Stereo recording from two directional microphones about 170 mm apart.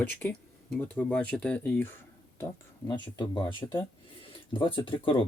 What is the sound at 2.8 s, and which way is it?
Speech, 25° left (ahead or behind).